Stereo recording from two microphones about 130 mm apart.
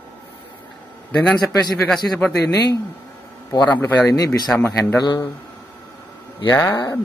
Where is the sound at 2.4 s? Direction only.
25° left (ahead or behind).